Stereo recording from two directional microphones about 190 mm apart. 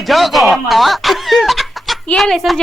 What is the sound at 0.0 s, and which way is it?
Speech, centre (ahead or behind).